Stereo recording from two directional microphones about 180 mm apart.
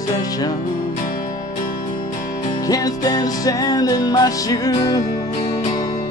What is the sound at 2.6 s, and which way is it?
Music, 20° left (ahead or behind).